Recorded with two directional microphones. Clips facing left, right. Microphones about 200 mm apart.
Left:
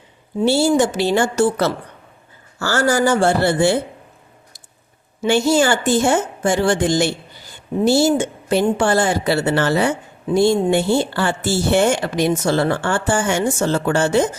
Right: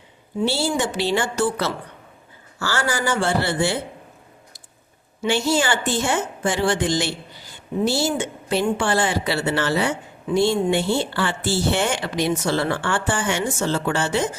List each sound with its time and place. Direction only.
0.4 s speech: 45° left (ahead or behind)
5.2 s speech: 45° left (ahead or behind)